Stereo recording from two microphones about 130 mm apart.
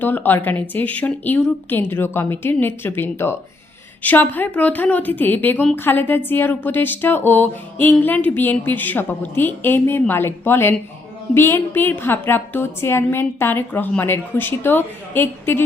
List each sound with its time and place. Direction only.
0.0 s speech: 15° left (ahead or behind)